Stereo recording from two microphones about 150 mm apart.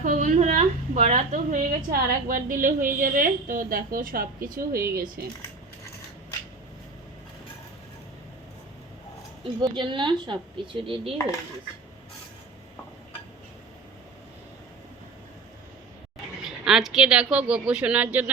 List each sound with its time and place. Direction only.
0.0 s a woman's voice: 60° right (ahead or behind)
5.2 s speech: 90° right
9.4 s speech: 30° right (ahead or behind)
16.4 s speech: centre (ahead or behind)